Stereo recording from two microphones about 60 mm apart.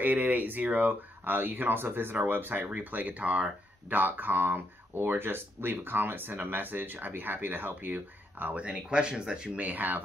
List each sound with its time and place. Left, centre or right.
0.0 s speech: right
8.6 s speech: centre
9.6 s speech: right